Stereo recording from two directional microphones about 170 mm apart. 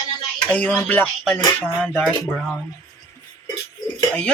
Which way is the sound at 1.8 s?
5° left (ahead or behind).